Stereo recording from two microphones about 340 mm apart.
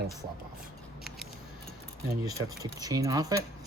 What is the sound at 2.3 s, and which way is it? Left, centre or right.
Speech, centre.